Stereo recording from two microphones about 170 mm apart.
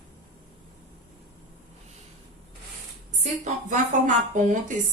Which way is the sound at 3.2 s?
45° right (ahead or behind).